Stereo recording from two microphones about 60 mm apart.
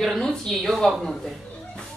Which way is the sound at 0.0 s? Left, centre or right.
Centre.